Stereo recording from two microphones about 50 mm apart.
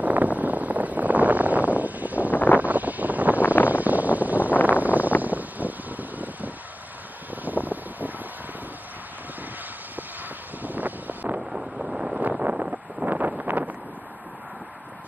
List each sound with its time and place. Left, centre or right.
0.0 s a sound: right
2.4 s vehicle: right
3.6 s wind noise: right
5.2 s vehicle: right
7.4 s wind noise: right
10.6 s vehicle: right
11.5 s wind noise: centre
12.2 s wind noise: right
13.0 s a sound: right